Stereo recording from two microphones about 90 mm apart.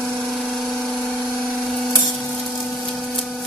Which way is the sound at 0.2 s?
Centre (ahead or behind).